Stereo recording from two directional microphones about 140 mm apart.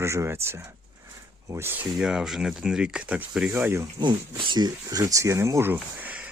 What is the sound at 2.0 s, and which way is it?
Speech, 5° right (ahead or behind).